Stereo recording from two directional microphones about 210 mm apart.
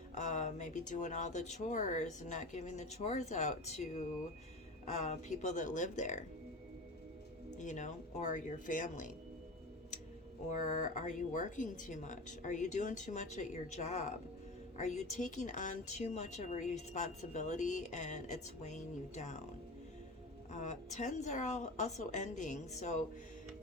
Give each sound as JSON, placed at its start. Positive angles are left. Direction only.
{"t": 0.1, "sound": "a woman's voice", "side_deg": 35}
{"t": 5.0, "sound": "a woman's voice", "side_deg": 35}
{"t": 7.6, "sound": "a woman's voice", "side_deg": 35}
{"t": 10.5, "sound": "a woman's voice", "side_deg": 35}
{"t": 20.5, "sound": "a woman's voice", "side_deg": 35}